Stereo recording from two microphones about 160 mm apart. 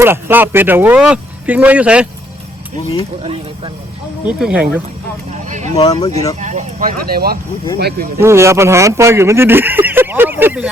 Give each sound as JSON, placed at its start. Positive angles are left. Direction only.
{"t": 0.0, "sound": "speech", "side_deg": -15}
{"t": 4.3, "sound": "speech", "side_deg": -5}
{"t": 5.3, "sound": "speech", "side_deg": -45}
{"t": 5.7, "sound": "speech", "side_deg": 20}
{"t": 6.4, "sound": "speech", "side_deg": -50}
{"t": 8.2, "sound": "speech", "side_deg": -15}